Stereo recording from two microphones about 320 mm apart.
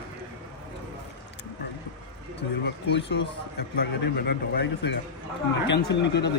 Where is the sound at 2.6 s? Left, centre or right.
Left.